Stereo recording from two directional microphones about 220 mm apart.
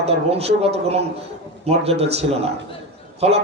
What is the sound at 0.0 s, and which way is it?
Speech, 30° right (ahead or behind).